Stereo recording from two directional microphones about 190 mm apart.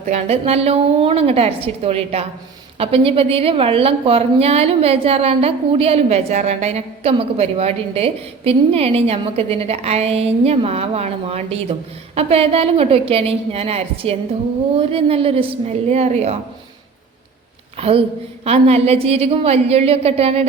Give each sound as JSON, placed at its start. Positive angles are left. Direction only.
{"t": 0.0, "sound": "a woman's voice", "side_deg": -35}
{"t": 17.7, "sound": "a woman's voice", "side_deg": -30}